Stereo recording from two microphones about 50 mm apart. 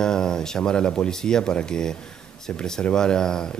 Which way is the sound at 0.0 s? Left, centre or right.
Centre.